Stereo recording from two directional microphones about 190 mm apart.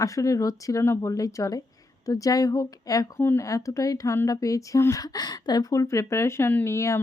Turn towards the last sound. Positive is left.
turn(degrees=15)  # may be behind; listen again after turning